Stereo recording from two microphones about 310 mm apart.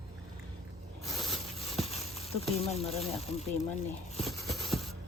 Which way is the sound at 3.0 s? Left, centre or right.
Centre.